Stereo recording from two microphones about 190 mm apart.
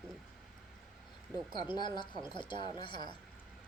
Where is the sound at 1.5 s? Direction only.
25° left (ahead or behind).